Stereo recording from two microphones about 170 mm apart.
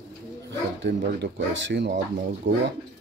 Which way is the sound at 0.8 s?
85° right.